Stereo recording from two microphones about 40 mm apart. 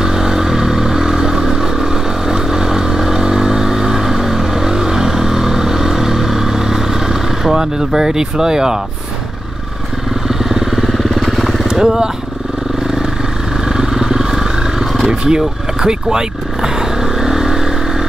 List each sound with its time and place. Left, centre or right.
0.0 s vehicle: centre
10.2 s vehicle: centre
11.6 s speech: centre
13.7 s vehicle: centre